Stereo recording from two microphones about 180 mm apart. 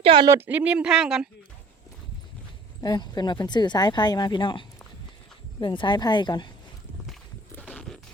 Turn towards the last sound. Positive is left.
turn(degrees=5)  # may be behind; listen again after turning